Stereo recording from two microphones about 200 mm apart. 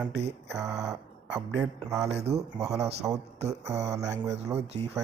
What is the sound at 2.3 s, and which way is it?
Speech, 30° right (ahead or behind).